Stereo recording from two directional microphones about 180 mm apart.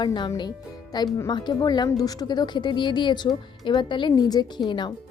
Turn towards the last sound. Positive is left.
turn(degrees=25)  # may be behind; listen again after turning